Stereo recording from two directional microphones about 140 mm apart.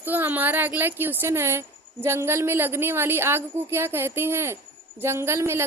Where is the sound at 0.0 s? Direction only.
15° right (ahead or behind).